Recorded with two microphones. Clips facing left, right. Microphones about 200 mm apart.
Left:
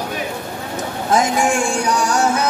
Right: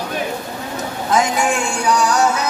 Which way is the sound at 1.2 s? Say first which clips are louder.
Left 1 dB; 45° left (ahead or behind).